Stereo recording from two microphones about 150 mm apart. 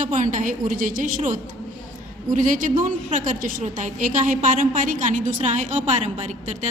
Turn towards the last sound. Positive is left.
turn(degrees=-50)  # may be behind; listen again after turning